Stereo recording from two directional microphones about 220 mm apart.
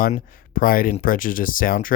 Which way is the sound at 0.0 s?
40° left (ahead or behind).